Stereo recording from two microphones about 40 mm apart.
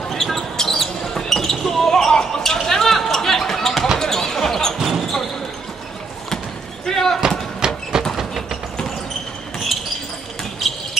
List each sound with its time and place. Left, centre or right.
0.1 s basketball bounce: centre
4.7 s basketball bounce: centre
6.9 s basketball bounce: centre
7.2 s horse: centre